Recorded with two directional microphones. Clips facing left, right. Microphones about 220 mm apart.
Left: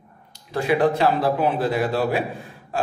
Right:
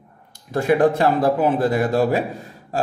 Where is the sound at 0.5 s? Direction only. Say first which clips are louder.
Right 3 dB; 50° right (ahead or behind).